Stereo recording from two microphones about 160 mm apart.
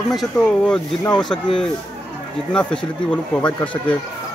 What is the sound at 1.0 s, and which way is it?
Speech, 25° left (ahead or behind).